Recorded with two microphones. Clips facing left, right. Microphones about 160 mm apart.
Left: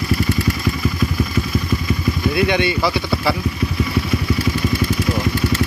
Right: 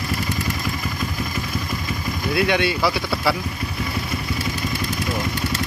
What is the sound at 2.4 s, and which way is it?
Speech, centre (ahead or behind).